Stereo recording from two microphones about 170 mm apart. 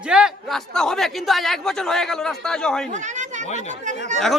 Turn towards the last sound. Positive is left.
turn(degrees=-45)  # may be behind; listen again after turning